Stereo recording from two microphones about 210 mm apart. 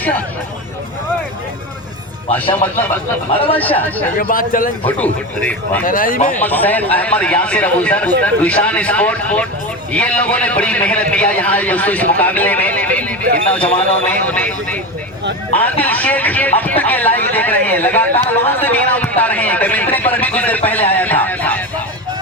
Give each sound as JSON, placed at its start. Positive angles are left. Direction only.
{"t": 3.6, "sound": "a man's voice", "side_deg": 10}
{"t": 4.2, "sound": "speech", "side_deg": 40}
{"t": 4.9, "sound": "a man's voice", "side_deg": 10}
{"t": 5.8, "sound": "speech", "side_deg": 40}
{"t": 6.3, "sound": "a man's voice", "side_deg": 10}